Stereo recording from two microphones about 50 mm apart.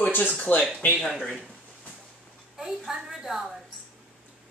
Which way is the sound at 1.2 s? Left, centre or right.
Centre.